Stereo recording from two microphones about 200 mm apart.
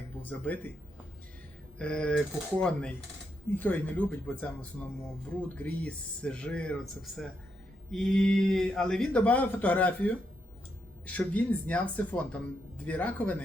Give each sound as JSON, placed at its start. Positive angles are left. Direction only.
{"t": 0.2, "sound": "speech", "side_deg": 10}
{"t": 1.8, "sound": "speech", "side_deg": 5}
{"t": 5.5, "sound": "speech", "side_deg": 5}